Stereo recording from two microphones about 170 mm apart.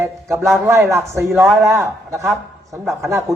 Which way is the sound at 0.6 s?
15° right (ahead or behind).